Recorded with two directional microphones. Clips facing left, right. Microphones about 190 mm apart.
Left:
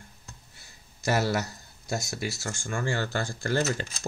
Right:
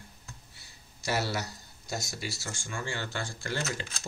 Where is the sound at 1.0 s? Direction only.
50° left (ahead or behind).